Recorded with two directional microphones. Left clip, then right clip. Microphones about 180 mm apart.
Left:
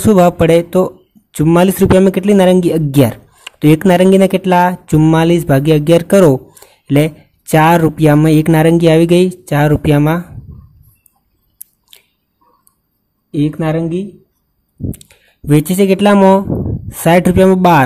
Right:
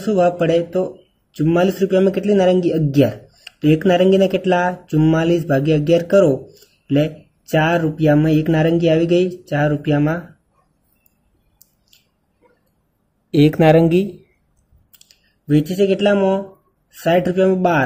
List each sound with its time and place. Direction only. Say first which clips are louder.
0.0 s speech: left 6 dB; 40° left (ahead or behind)
13.3 s speech: right 4 dB; 15° left (ahead or behind)
15.5 s speech: left 5 dB; 35° left (ahead or behind)